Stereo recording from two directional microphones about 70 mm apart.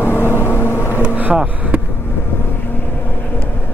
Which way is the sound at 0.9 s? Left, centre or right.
Right.